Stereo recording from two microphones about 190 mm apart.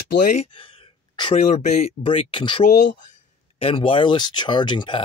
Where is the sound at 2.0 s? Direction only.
25° left (ahead or behind).